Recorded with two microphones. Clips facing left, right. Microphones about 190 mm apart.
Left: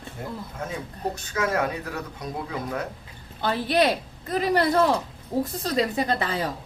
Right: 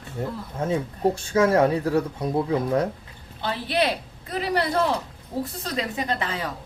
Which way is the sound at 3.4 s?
45° left (ahead or behind).